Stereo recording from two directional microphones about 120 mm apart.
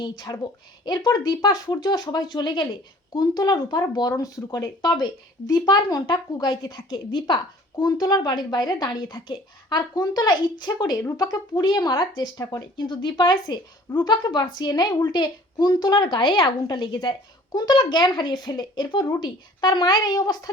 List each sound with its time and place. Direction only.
0.0 s speech: 35° left (ahead or behind)